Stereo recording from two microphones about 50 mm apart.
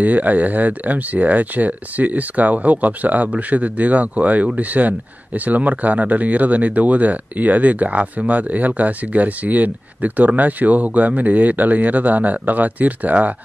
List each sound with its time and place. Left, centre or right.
0.0 s speech: right